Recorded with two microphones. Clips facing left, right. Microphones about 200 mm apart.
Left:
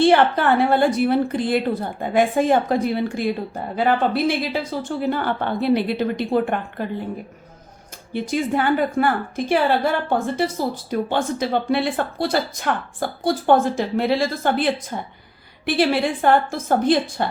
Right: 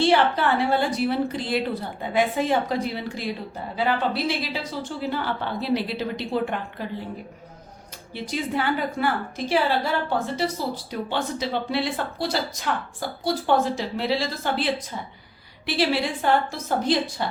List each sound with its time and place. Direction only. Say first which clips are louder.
0.0 s a woman's voice: left 4 dB; 50° left (ahead or behind)
8.1 s a woman's voice: left 6 dB; 50° left (ahead or behind)